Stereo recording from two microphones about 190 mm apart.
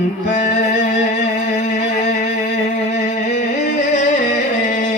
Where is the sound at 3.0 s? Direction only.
40° left (ahead or behind).